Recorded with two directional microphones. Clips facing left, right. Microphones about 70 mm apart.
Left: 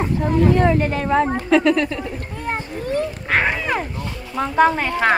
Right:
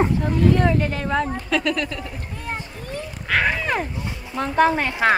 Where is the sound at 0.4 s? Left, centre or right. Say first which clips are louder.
Left 3 dB; left.